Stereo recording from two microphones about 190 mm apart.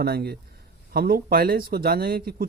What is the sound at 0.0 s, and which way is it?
Speech, 55° right (ahead or behind).